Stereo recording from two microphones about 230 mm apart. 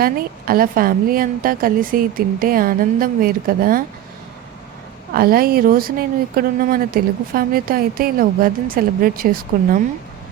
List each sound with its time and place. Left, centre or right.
0.0 s speech: right
5.1 s speech: right